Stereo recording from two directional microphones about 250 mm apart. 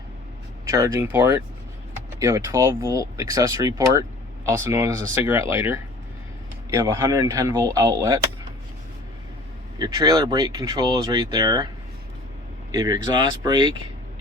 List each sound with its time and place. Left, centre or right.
0.7 s speech: centre
9.7 s speech: centre
12.7 s speech: centre